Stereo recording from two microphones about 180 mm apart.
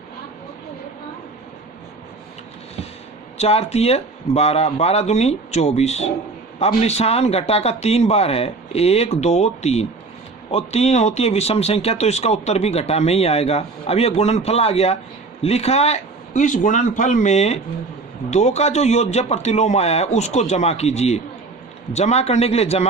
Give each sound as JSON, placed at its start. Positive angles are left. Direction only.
{"t": 3.3, "sound": "speech", "side_deg": 35}